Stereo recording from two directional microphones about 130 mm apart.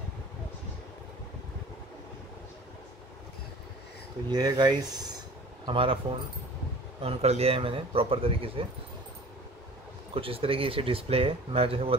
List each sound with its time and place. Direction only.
4.3 s speech: 35° right (ahead or behind)
5.7 s speech: 45° right (ahead or behind)
7.0 s speech: 50° right (ahead or behind)
10.1 s speech: 45° right (ahead or behind)